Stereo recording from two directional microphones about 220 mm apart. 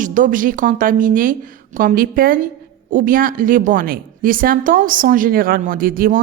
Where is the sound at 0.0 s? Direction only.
35° right (ahead or behind).